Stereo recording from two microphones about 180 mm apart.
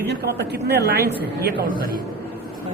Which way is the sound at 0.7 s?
65° right (ahead or behind).